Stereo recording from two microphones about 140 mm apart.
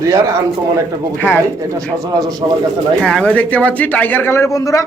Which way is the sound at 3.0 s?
5° left (ahead or behind).